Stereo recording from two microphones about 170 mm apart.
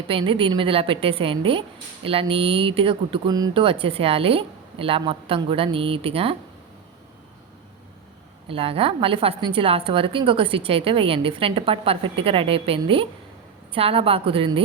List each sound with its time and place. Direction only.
0.1 s a woman's voice: 30° right (ahead or behind)
8.4 s a woman's voice: 35° right (ahead or behind)